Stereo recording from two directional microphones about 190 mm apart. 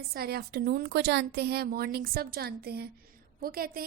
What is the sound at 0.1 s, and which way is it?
A woman's voice, 55° right (ahead or behind).